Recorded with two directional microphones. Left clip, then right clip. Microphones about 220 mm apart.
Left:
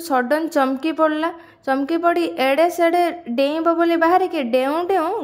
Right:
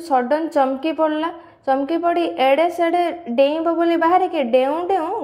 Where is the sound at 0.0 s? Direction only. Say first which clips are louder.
Right 1 dB; 30° left (ahead or behind).